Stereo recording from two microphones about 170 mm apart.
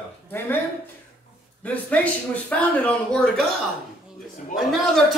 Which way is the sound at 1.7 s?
10° left (ahead or behind).